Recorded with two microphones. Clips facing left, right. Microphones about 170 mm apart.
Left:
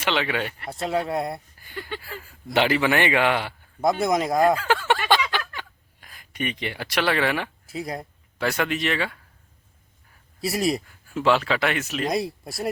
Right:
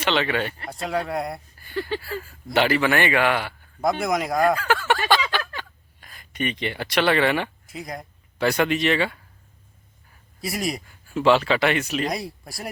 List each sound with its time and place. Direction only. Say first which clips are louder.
0.0 s speech: right 2 dB; 10° left (ahead or behind)
0.7 s speech: left 3 dB; 25° left (ahead or behind); by 7.5 s centre (ahead or behind)
7.7 s speech: left 3 dB; 30° left (ahead or behind)
8.4 s speech: right 4 dB; centre (ahead or behind)
10.8 s speech: right 3 dB; centre (ahead or behind)